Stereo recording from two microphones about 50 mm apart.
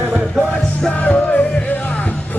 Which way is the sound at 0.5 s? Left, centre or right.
Centre.